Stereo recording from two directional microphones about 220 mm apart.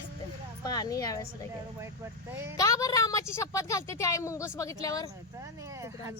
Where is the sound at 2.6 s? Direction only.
15° left (ahead or behind).